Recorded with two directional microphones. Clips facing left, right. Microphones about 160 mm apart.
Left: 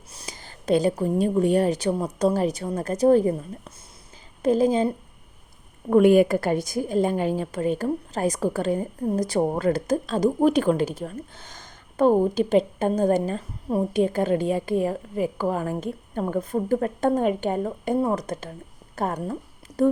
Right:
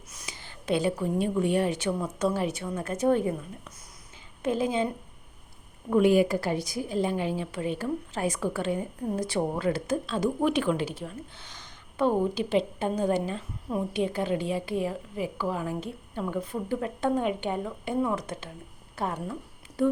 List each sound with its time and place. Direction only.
0.1 s a woman's voice: 35° left (ahead or behind)
5.9 s a woman's voice: 55° left (ahead or behind)